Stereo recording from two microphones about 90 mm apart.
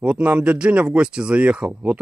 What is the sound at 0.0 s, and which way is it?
Speech, 15° right (ahead or behind).